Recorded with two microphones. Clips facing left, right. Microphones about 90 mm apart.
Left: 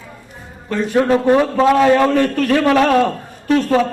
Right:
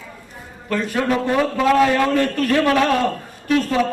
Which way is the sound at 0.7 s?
30° left (ahead or behind).